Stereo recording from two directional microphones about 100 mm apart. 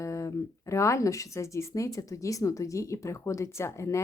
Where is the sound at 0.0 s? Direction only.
30° left (ahead or behind).